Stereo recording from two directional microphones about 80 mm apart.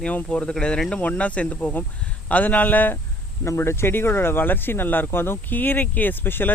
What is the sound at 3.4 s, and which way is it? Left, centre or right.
Speech, left.